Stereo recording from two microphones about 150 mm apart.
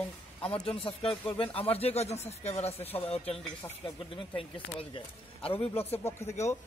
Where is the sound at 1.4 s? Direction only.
40° left (ahead or behind).